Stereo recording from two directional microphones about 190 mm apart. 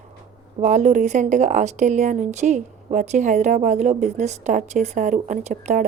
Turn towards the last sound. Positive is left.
turn(degrees=-40)  # may be behind; listen again after turning